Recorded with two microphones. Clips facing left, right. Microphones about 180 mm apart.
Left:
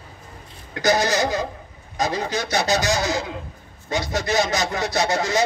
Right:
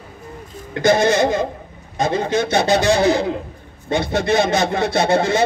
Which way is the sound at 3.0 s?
60° right (ahead or behind).